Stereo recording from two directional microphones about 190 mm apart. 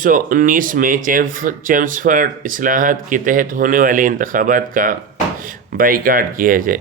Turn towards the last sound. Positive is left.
turn(degrees=-45)  # may be behind; listen again after turning